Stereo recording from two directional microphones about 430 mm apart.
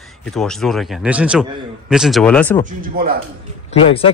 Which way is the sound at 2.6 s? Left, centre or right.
Centre.